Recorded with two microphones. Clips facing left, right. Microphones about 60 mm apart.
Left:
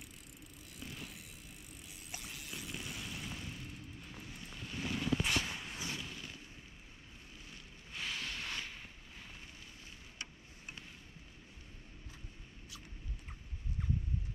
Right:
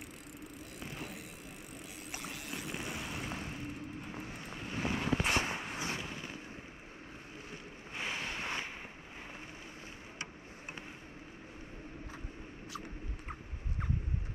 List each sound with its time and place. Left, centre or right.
0.7 s a sound: right
2.1 s vehicle: right
7.9 s ocean: right
12.7 s rodents: right